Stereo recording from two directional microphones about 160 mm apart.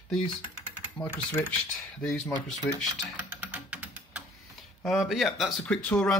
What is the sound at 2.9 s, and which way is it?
Music, 10° right (ahead or behind).